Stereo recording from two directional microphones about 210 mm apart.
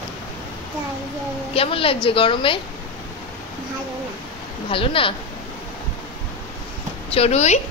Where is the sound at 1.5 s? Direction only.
25° left (ahead or behind).